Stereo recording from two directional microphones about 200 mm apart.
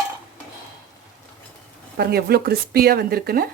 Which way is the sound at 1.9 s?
50° right (ahead or behind).